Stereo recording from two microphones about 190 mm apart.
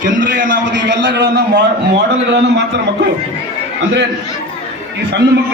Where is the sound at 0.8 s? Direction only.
70° right (ahead or behind).